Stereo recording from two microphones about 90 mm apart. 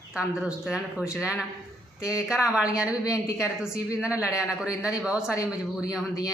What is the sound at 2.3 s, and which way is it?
Speech, 10° right (ahead or behind).